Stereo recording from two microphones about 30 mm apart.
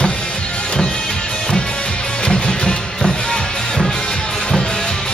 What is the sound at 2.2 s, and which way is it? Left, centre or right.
Music, left.